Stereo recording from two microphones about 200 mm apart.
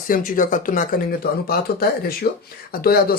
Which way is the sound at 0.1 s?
45° left (ahead or behind).